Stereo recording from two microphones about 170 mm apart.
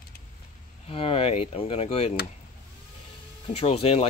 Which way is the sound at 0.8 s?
35° left (ahead or behind).